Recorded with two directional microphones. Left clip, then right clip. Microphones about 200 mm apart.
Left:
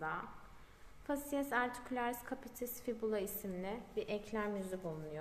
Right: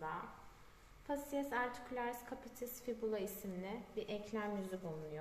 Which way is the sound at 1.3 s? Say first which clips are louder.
Left 4 dB; 45° left (ahead or behind).